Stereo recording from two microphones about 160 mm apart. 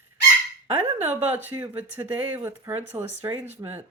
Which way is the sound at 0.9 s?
10° right (ahead or behind).